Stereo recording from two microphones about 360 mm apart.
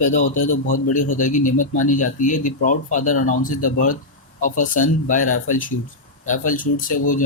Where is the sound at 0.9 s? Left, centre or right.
Left.